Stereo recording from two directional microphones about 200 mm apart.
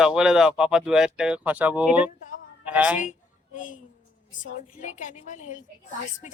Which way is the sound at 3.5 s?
40° left (ahead or behind).